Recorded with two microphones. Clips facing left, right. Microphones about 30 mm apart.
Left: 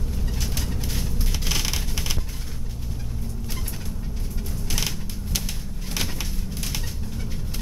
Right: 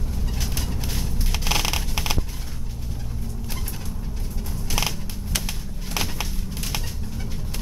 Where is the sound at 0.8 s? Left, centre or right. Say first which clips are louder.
Even; centre.